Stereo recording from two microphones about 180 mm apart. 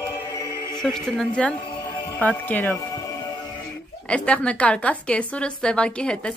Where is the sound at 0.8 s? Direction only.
5° left (ahead or behind).